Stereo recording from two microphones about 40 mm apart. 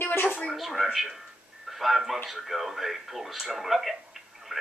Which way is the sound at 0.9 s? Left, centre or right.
Centre.